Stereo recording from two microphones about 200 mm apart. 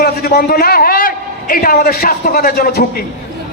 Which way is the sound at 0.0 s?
50° left (ahead or behind).